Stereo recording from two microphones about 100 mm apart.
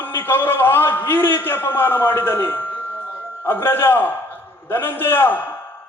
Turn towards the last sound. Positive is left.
turn(degrees=20)  # may be behind; listen again after turning